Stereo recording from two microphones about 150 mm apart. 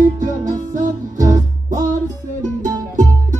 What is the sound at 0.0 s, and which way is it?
Music, 55° right (ahead or behind).